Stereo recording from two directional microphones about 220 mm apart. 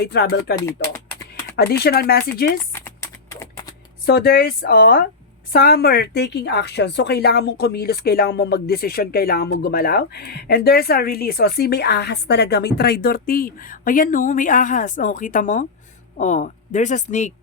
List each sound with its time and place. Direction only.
0.0 s a woman's voice: 45° left (ahead or behind)
1.5 s a woman's voice: 45° left (ahead or behind)
2.7 s typing: 10° left (ahead or behind)
4.0 s a woman's voice: 45° left (ahead or behind)